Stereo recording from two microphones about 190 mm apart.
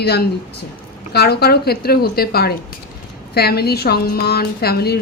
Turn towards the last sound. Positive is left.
turn(degrees=55)  # may be behind; listen again after turning